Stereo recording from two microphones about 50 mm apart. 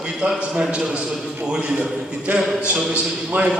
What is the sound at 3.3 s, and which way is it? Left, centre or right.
Speech, right.